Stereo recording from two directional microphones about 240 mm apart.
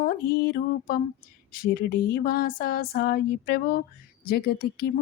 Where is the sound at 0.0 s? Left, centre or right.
Left.